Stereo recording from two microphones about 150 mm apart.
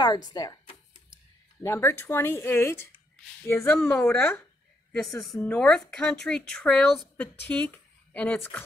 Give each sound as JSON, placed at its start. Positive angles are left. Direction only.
{"t": 0.0, "sound": "speech", "side_deg": 30}